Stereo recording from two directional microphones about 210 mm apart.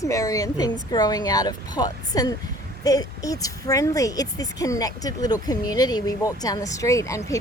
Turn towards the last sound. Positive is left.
turn(degrees=15)  # may be behind; listen again after turning